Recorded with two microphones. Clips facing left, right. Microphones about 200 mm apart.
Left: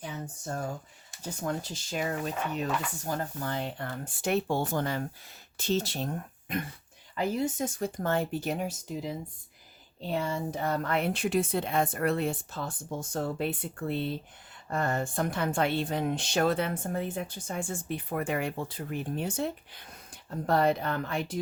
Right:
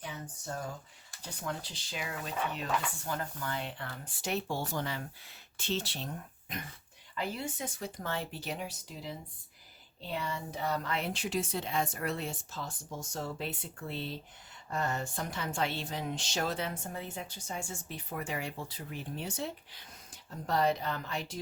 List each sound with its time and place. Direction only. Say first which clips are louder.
1.2 s speech: left 6 dB; 45° left (ahead or behind)